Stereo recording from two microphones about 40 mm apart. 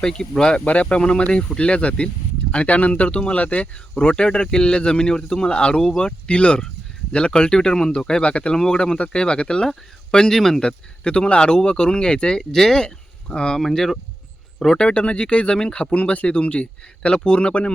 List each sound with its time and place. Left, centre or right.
0.0 s speech: centre
0.6 s speech: left
4.1 s speech: left
10.6 s speech: left
12.4 s speech: centre
13.6 s speech: centre
14.8 s speech: left